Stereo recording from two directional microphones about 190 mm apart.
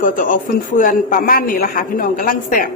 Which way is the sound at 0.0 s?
45° left (ahead or behind).